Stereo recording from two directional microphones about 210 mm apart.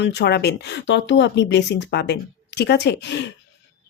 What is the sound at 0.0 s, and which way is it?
A woman's voice, 55° left (ahead or behind).